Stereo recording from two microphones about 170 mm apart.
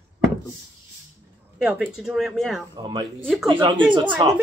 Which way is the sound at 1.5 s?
5° right (ahead or behind).